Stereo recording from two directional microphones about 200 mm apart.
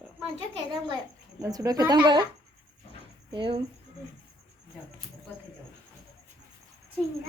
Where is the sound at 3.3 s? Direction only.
25° right (ahead or behind).